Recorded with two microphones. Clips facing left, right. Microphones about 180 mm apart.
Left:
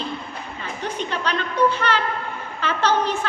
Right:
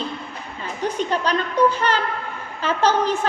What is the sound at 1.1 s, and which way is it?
Speech, 40° right (ahead or behind).